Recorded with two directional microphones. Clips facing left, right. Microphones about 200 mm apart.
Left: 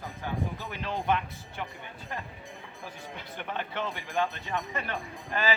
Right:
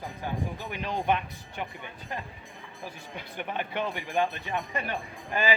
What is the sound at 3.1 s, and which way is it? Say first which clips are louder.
Speech: right 2 dB; 15° right (ahead or behind).